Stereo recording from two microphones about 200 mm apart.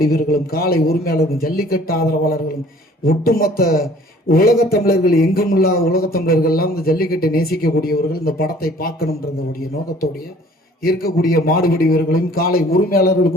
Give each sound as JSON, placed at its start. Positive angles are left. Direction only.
{"t": 0.0, "sound": "speech", "side_deg": 45}
{"t": 10.8, "sound": "speech", "side_deg": 50}